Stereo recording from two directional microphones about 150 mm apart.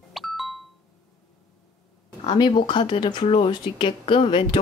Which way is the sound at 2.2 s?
30° left (ahead or behind).